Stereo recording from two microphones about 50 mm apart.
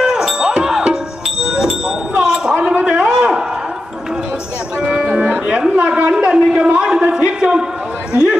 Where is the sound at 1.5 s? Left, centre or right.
Centre.